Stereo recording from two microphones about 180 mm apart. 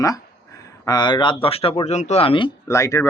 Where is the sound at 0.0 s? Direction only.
20° left (ahead or behind).